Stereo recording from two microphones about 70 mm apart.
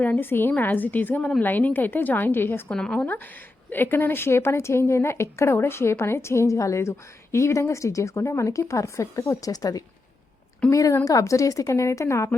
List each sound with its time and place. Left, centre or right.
0.0 s a woman's voice: left
2.7 s speech: centre
3.7 s a woman's voice: left
10.7 s a woman's voice: left